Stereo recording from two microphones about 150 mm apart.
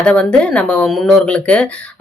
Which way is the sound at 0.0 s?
5° left (ahead or behind).